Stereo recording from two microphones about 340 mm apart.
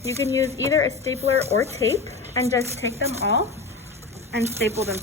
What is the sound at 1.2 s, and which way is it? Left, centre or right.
Speech, centre.